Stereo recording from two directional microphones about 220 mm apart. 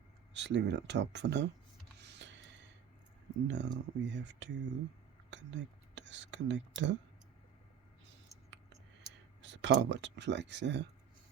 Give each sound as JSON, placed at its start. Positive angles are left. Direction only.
{"t": 0.3, "sound": "speech", "side_deg": -55}
{"t": 2.0, "sound": "gasp", "side_deg": -50}
{"t": 3.4, "sound": "speech", "side_deg": -55}
{"t": 8.0, "sound": "a sound", "side_deg": -55}
{"t": 9.4, "sound": "speech", "side_deg": -55}